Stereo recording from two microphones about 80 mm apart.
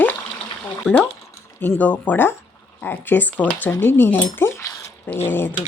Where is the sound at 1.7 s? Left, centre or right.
Centre.